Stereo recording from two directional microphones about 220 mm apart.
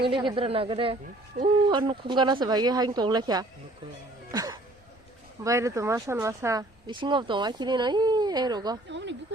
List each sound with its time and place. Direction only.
0.0 s speech: 20° right (ahead or behind)
4.3 s music: 15° right (ahead or behind)
5.4 s speech: 15° right (ahead or behind)
8.9 s a sound: 55° right (ahead or behind)